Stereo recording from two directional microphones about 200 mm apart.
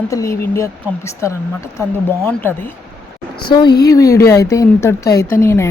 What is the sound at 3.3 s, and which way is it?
A woman's voice, 20° left (ahead or behind).